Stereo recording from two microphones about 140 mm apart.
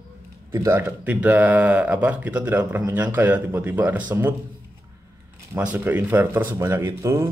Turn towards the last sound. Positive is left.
turn(degrees=-20)  # may be behind; listen again after turning